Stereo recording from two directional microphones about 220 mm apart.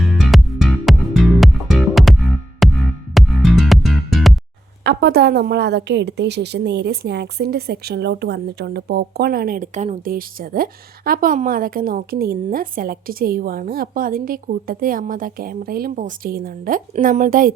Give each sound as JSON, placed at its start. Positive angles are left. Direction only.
{"t": 0.1, "sound": "music", "side_deg": 0}
{"t": 4.8, "sound": "a woman's voice", "side_deg": -50}